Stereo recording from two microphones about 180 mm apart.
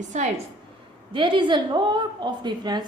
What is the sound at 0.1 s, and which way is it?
Speech, 45° right (ahead or behind).